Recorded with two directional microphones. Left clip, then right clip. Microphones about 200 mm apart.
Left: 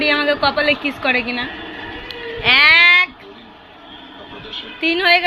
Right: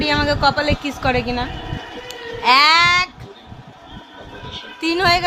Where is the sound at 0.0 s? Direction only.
25° right (ahead or behind).